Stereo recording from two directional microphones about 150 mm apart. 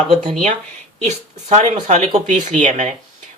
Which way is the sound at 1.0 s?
50° right (ahead or behind).